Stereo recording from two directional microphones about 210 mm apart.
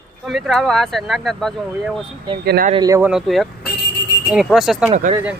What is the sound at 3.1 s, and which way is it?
Speech, centre (ahead or behind).